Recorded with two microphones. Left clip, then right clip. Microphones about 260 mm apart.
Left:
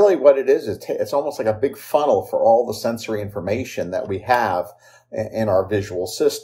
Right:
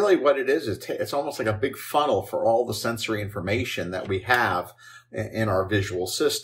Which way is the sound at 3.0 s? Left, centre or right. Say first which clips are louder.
Left 3 dB; centre.